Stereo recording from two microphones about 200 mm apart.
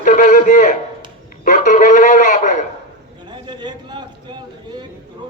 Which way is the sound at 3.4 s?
25° right (ahead or behind).